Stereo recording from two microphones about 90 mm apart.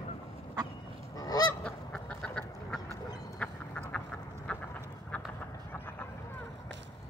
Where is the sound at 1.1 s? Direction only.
45° left (ahead or behind).